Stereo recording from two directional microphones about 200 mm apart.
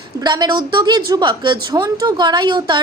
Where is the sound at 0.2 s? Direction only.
20° right (ahead or behind).